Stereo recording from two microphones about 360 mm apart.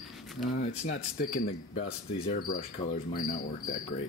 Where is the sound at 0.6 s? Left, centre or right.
Left.